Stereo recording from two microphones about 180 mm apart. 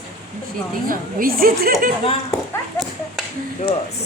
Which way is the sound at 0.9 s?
55° right (ahead or behind).